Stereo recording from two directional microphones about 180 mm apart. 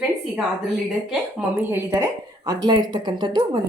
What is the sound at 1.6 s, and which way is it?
A woman's voice, 10° right (ahead or behind).